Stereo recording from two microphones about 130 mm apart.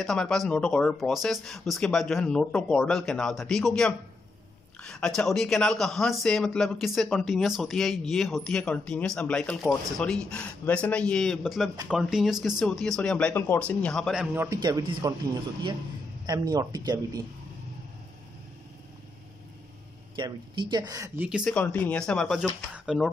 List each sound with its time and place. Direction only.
0.0 s speech: 5° left (ahead or behind)
13.3 s speech: 15° left (ahead or behind); by 14.3 s centre (ahead or behind)
14.3 s a man's voice: 15° right (ahead or behind)
14.6 s speech: 35° right (ahead or behind)
16.3 s speech: 30° right (ahead or behind)
20.2 s speech: 35° right (ahead or behind)
21.5 s speech: 10° left (ahead or behind)